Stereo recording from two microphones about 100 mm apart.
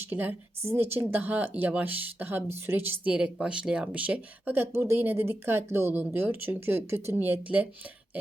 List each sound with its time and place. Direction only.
0.0 s speech: 15° right (ahead or behind)